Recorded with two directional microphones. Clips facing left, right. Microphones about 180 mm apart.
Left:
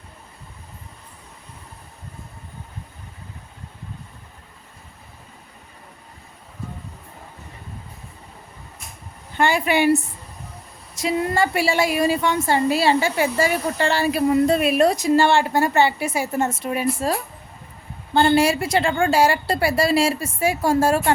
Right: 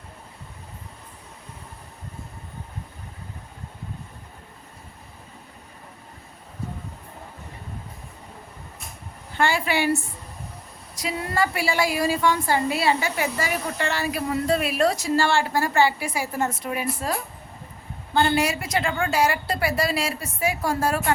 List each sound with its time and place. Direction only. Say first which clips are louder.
9.4 s a woman's voice: left 4 dB; 20° left (ahead or behind)